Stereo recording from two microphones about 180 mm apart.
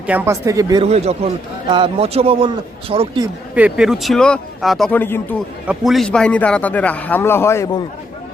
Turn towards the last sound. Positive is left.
turn(degrees=15)  # may be behind; listen again after turning